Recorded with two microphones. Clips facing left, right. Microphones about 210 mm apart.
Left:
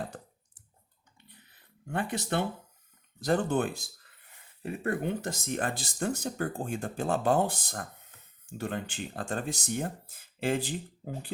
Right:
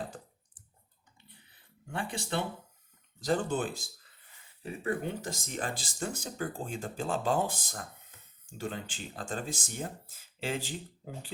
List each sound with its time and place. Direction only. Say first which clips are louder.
1.9 s speech: left 4 dB; 55° left (ahead or behind)